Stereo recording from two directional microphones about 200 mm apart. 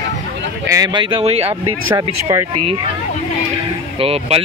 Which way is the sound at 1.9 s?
15° right (ahead or behind).